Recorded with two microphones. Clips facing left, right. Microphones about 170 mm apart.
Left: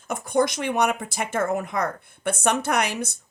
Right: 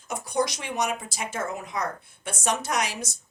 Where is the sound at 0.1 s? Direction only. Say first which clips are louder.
Left 5 dB; 55° left (ahead or behind).